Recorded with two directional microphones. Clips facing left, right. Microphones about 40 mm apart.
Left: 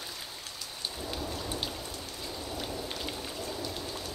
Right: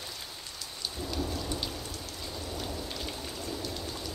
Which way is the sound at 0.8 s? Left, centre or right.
Left.